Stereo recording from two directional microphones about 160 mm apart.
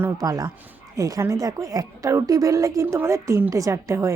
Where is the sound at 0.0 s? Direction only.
20° right (ahead or behind).